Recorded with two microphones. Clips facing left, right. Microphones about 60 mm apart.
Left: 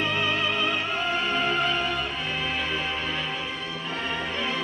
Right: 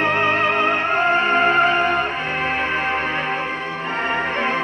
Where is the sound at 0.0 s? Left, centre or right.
Right.